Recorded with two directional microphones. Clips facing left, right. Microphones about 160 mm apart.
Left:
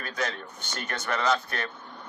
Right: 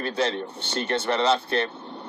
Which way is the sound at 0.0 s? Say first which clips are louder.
Right 7 dB; 30° right (ahead or behind).